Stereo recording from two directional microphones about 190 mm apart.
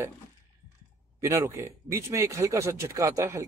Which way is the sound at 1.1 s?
15° right (ahead or behind).